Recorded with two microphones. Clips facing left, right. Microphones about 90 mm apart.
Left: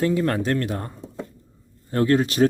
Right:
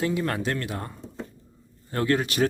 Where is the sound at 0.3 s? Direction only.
40° left (ahead or behind).